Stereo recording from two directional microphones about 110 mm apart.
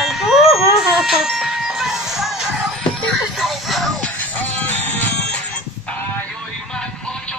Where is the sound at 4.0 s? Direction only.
15° left (ahead or behind).